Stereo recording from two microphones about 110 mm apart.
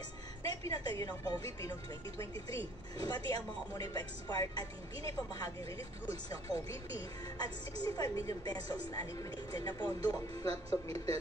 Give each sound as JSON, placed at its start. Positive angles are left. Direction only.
{"t": 0.4, "sound": "a woman's voice", "side_deg": 30}